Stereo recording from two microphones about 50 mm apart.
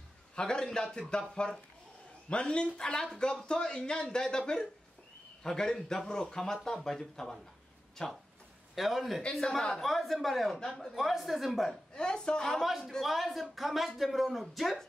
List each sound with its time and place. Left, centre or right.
0.4 s a man's voice: centre
8.7 s speech: centre
9.2 s speech: centre
11.9 s a man's voice: centre
12.6 s speech: centre